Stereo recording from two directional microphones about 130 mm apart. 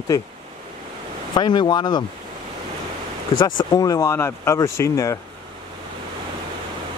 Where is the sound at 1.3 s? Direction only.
35° left (ahead or behind).